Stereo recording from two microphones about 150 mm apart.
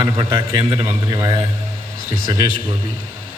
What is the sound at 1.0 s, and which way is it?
Speech, 20° right (ahead or behind).